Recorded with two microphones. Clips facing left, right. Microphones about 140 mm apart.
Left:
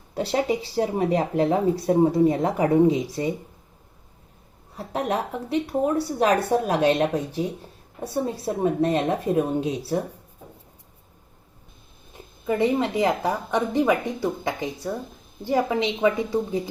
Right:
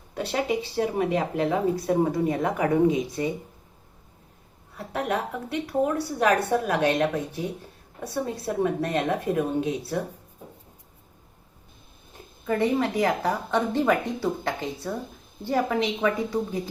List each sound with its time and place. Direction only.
0.1 s speech: 30° left (ahead or behind)
4.9 s a woman's voice: 30° left (ahead or behind)
12.5 s a woman's voice: 20° left (ahead or behind)